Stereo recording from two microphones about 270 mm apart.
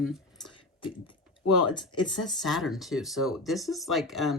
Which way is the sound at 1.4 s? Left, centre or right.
Left.